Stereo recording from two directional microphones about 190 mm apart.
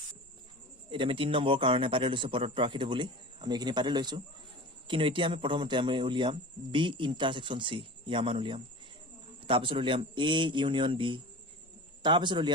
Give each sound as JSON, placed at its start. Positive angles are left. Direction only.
{"t": 0.9, "sound": "speech", "side_deg": -25}